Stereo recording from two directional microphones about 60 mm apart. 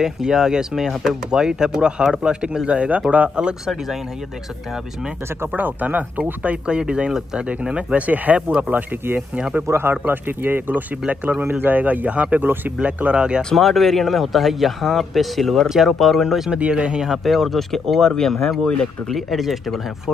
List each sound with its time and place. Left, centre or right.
0.0 s speech: centre
5.6 s speech: right
8.6 s speech: right
12.8 s speech: centre
13.4 s speech: centre
16.5 s speech: centre
17.1 s speech: centre
19.0 s speech: centre